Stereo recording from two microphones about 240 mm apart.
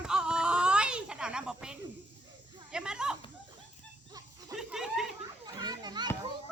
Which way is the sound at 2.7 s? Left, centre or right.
Centre.